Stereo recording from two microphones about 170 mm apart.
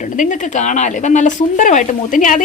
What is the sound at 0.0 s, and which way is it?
A woman's voice, 45° left (ahead or behind).